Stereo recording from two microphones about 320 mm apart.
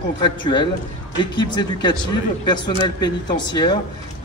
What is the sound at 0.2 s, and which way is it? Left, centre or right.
A man's voice, centre.